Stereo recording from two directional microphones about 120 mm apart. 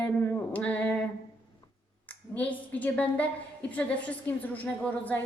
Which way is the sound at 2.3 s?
15° left (ahead or behind).